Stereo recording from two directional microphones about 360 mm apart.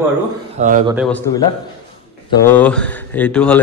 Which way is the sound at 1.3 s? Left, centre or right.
Centre.